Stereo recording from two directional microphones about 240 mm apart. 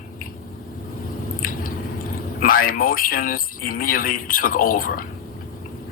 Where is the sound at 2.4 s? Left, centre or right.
Left.